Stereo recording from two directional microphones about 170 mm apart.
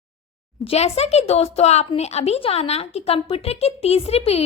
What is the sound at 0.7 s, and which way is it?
A woman's voice, 40° left (ahead or behind).